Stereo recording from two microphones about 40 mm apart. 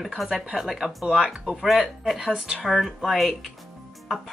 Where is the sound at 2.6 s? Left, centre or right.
Centre.